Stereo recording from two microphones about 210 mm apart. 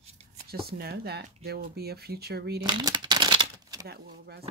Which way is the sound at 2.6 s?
20° right (ahead or behind).